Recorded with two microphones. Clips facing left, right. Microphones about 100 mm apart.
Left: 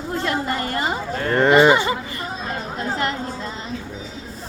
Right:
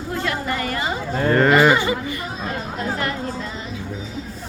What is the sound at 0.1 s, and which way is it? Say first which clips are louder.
Speech: left 1 dB; 30° left (ahead or behind).